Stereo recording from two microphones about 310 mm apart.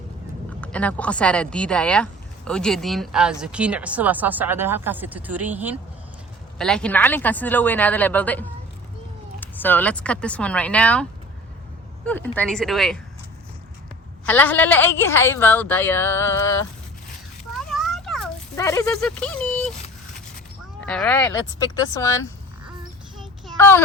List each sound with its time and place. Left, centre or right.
0.6 s speech: centre
12.0 s speech: centre
14.3 s a woman's voice: centre
17.5 s children playing: centre
18.5 s speech: centre
20.8 s a woman's voice: centre
22.6 s a sound: centre